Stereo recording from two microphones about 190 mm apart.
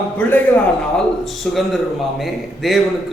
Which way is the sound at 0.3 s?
10° left (ahead or behind).